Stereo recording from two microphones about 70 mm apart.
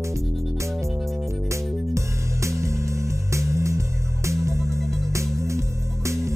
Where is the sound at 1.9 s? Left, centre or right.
Right.